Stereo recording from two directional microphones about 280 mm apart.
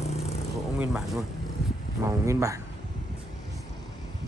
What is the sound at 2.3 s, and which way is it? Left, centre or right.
Speech, centre.